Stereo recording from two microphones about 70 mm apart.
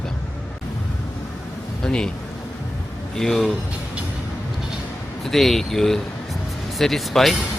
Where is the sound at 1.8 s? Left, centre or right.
Centre.